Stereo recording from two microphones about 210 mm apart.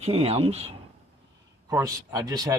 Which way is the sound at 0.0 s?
30° right (ahead or behind).